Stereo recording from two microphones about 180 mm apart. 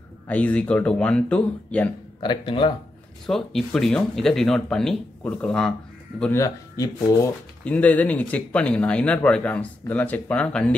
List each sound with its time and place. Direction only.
0.3 s speech: 10° left (ahead or behind)
2.1 s speech: 30° left (ahead or behind)
3.3 s speech: centre (ahead or behind)
6.4 s speech: 20° left (ahead or behind)
7.6 s speech: 5° left (ahead or behind)